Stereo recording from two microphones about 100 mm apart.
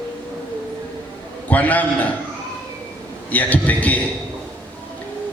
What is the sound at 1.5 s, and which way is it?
Speech, 15° left (ahead or behind).